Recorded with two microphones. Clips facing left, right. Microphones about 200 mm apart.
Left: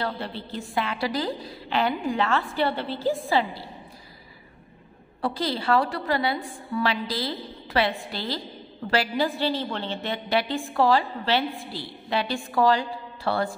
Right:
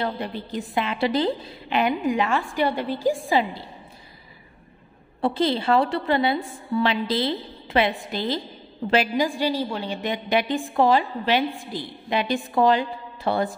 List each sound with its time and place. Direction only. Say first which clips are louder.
0.0 s a woman's voice: right 3 dB; 15° right (ahead or behind)
5.2 s a woman's voice: right 5 dB; 25° right (ahead or behind)